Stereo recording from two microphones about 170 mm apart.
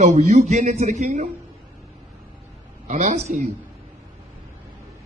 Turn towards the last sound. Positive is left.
turn(degrees=-50)  # may be behind; listen again after turning